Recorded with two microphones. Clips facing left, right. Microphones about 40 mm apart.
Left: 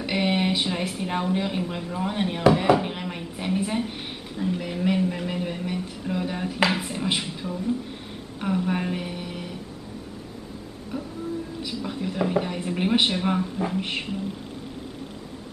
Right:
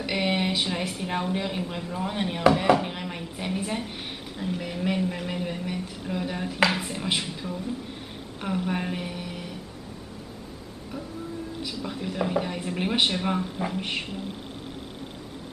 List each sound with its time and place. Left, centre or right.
0.0 s a woman's voice: centre
11.8 s speech: centre